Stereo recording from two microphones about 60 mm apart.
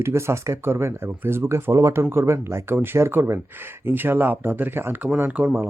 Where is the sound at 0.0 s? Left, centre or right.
Right.